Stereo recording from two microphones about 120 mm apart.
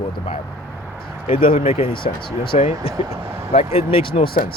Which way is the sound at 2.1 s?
65° left (ahead or behind).